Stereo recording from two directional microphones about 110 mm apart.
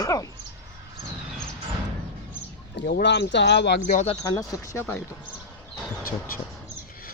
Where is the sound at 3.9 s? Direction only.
65° left (ahead or behind).